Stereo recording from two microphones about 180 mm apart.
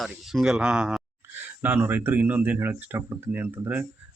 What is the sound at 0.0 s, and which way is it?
Speech, centre (ahead or behind).